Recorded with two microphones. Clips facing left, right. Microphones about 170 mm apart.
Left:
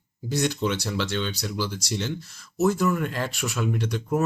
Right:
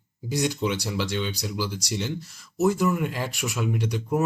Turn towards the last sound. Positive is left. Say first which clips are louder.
# even
turn(degrees=-15)  # may be behind; listen again after turning